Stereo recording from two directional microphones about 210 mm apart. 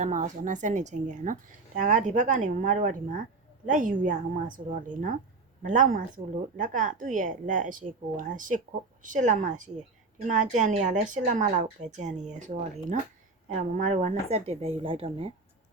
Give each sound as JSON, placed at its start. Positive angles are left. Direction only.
{"t": 0.0, "sound": "a woman's voice", "side_deg": -35}